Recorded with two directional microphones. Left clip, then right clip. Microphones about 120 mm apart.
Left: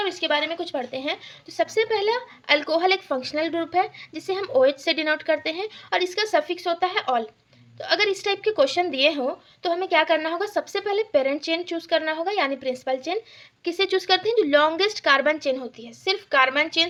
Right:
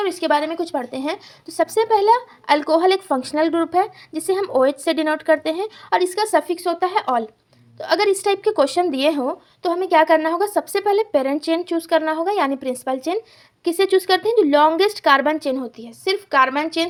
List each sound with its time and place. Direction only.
0.0 s a woman's voice: 45° right (ahead or behind); by 16.8 s 25° right (ahead or behind)